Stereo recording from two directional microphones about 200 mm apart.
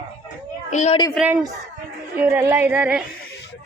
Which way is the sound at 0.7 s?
35° left (ahead or behind).